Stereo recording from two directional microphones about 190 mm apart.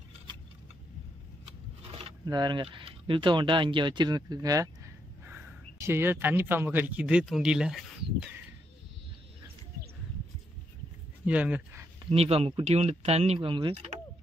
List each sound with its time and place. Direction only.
1.4 s speech: 30° right (ahead or behind); by 7.8 s 5° right (ahead or behind)
11.2 s speech: 5° right (ahead or behind)
12.0 s speech: 30° right (ahead or behind)